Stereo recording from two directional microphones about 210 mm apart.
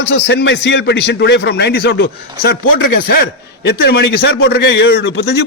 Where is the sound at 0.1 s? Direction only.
55° left (ahead or behind).